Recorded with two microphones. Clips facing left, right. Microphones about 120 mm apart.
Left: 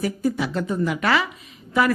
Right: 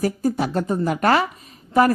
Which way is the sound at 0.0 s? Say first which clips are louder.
Right 2 dB; 40° right (ahead or behind).